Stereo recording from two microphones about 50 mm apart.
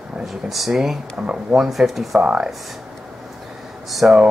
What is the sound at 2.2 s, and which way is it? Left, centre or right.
Speech, right.